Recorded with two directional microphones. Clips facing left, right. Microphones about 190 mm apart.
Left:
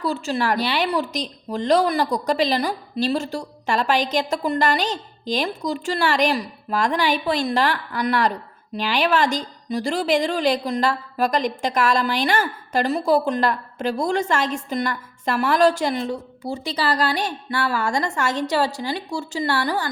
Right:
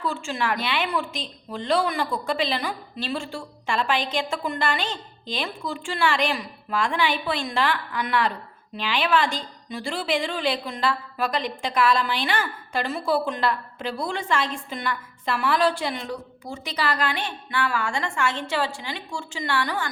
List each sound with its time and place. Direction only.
0.0 s a woman's voice: 40° left (ahead or behind)
16.0 s a woman's voice: 30° left (ahead or behind)